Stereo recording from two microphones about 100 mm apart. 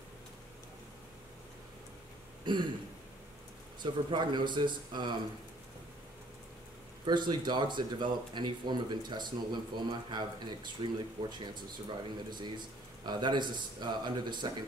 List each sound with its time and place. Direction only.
2.4 s throat clearing: 50° right (ahead or behind)
3.8 s speech: 50° right (ahead or behind)
7.1 s speech: 50° right (ahead or behind)